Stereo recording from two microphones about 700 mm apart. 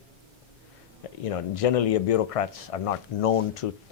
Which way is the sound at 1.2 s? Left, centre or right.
Left.